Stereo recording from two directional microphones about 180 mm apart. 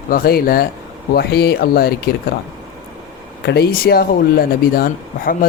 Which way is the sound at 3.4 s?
65° left (ahead or behind).